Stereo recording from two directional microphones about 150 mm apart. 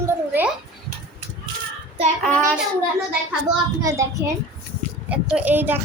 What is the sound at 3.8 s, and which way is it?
Speech, 20° right (ahead or behind).